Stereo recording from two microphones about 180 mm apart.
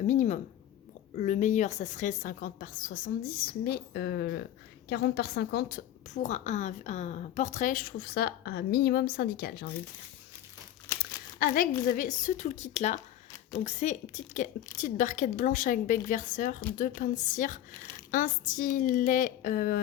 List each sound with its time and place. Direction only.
0.1 s a sound: 40° left (ahead or behind)
1.1 s a woman's voice: 40° left (ahead or behind)
3.6 s a woman's voice: 60° left (ahead or behind)
10.9 s crumpling: 15° left (ahead or behind)
11.3 s a woman's voice: 55° left (ahead or behind)